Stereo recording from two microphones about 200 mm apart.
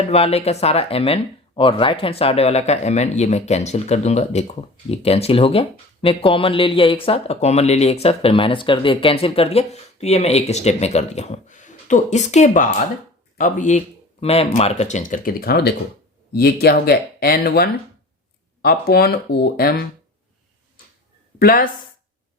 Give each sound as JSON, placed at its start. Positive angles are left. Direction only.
{"t": 0.1, "sound": "speech", "side_deg": 30}
{"t": 21.3, "sound": "a woman's voice", "side_deg": 45}